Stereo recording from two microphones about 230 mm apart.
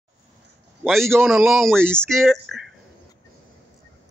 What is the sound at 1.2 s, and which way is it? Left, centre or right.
Speech, centre.